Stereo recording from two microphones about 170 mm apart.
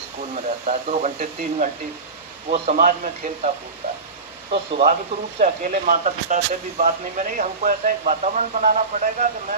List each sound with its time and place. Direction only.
0.3 s speech: 45° right (ahead or behind)
2.7 s speech: 50° right (ahead or behind)
4.7 s speech: 40° right (ahead or behind)
5.4 s speech: 50° right (ahead or behind)